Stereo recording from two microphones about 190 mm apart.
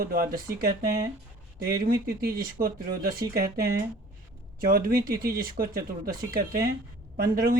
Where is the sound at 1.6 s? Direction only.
50° right (ahead or behind).